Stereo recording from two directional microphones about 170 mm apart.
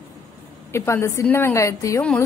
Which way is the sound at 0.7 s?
15° left (ahead or behind).